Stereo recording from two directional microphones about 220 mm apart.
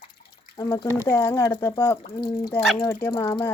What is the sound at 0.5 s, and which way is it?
Speech, 15° left (ahead or behind).